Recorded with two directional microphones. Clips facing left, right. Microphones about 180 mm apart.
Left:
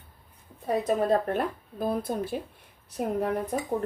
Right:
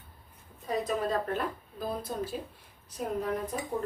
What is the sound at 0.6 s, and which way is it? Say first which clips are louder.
A woman's voice: left 5 dB; 55° left (ahead or behind).